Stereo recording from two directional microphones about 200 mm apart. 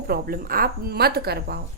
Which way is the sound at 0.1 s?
50° right (ahead or behind).